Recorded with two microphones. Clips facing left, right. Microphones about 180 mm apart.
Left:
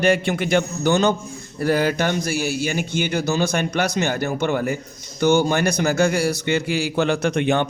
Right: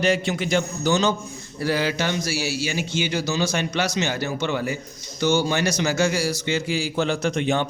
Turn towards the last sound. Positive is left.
turn(degrees=60)  # may be behind; listen again after turning